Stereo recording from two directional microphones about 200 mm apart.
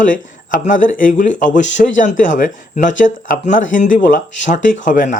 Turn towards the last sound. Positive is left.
turn(degrees=40)  # may be behind; listen again after turning